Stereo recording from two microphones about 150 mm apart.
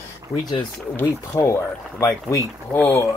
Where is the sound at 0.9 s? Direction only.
15° left (ahead or behind).